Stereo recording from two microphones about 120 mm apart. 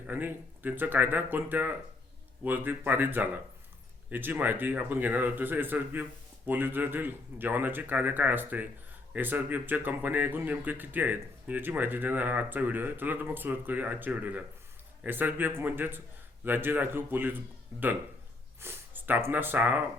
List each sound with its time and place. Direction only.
0.1 s speech: 15° right (ahead or behind)